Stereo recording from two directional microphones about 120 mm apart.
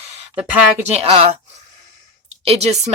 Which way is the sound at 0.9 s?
55° right (ahead or behind).